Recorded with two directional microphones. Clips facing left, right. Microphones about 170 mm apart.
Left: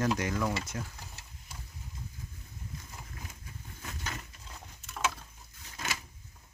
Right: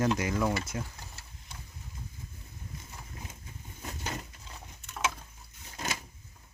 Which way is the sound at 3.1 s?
25° right (ahead or behind).